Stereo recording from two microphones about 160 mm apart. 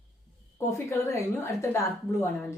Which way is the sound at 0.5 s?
15° left (ahead or behind).